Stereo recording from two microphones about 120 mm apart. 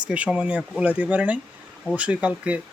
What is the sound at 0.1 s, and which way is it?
Speech, 10° right (ahead or behind).